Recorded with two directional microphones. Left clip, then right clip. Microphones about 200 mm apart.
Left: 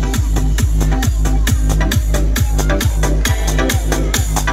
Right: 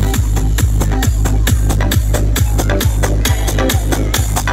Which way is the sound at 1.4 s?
20° right (ahead or behind).